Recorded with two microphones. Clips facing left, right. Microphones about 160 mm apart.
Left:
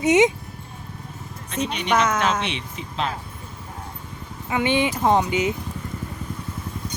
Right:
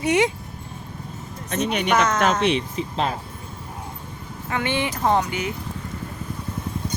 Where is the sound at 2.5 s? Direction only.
40° right (ahead or behind).